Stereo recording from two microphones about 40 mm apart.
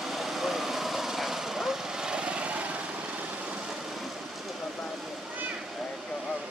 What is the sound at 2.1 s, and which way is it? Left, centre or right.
Vehicle, right.